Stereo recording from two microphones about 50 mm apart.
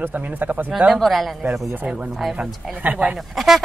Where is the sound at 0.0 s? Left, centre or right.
Right.